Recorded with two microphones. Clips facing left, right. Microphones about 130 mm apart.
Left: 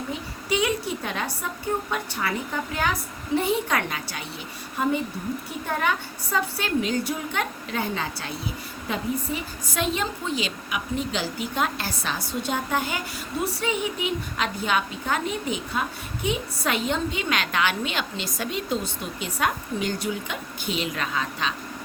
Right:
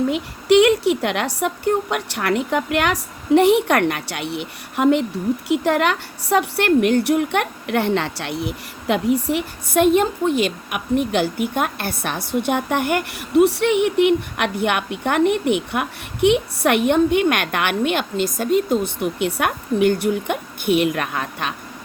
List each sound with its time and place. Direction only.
0.1 s a woman's voice: 70° right (ahead or behind)